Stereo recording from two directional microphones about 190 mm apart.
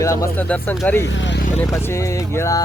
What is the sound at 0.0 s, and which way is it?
Speech, 15° left (ahead or behind).